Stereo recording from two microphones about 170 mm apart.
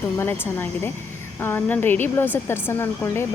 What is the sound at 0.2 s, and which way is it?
Speech, 10° left (ahead or behind).